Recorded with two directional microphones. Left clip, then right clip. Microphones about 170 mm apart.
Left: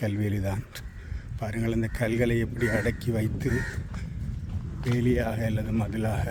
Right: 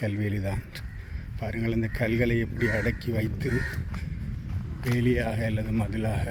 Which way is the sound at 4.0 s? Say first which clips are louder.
Right 1 dB; 10° left (ahead or behind).